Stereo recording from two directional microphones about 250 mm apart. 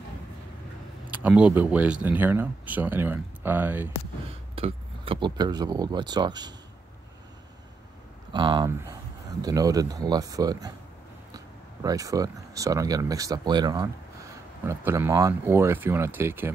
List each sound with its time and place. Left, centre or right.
1.1 s speech: centre
4.6 s speech: right
8.3 s speech: centre